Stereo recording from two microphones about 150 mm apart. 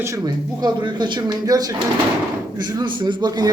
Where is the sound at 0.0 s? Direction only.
25° right (ahead or behind).